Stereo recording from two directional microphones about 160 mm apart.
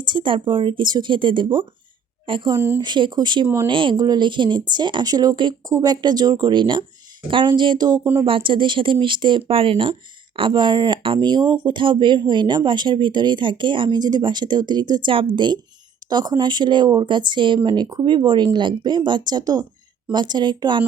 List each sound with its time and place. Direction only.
0.0 s speech: 30° right (ahead or behind)
3.4 s speech: 15° right (ahead or behind)
3.7 s speech: 30° right (ahead or behind)